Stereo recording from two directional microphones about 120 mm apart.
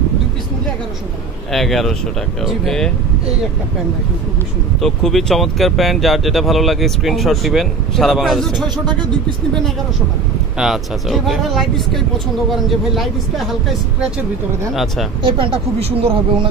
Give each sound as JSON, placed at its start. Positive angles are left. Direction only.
{"t": 1.5, "sound": "speech", "side_deg": 0}
{"t": 4.7, "sound": "speech", "side_deg": 0}
{"t": 8.6, "sound": "speech", "side_deg": -35}
{"t": 10.6, "sound": "speech", "side_deg": 0}
{"t": 15.2, "sound": "speech", "side_deg": -45}